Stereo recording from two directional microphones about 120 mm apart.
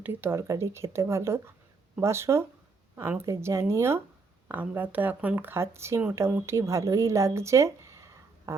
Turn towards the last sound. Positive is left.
turn(degrees=-25)  # may be behind; listen again after turning